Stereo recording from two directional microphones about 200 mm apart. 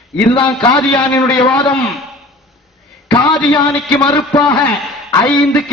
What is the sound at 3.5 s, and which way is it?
Speech, 25° left (ahead or behind).